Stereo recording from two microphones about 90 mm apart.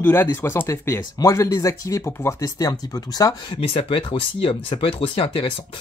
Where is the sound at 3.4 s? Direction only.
80° left.